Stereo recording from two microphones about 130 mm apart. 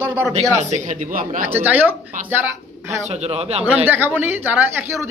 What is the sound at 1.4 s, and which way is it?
Speech, 15° right (ahead or behind).